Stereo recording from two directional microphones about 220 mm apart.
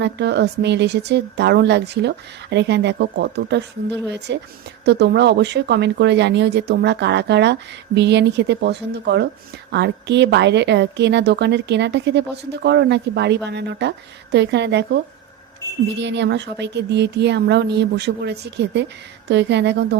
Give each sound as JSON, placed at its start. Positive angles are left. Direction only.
{"t": 0.0, "sound": "speech", "side_deg": -50}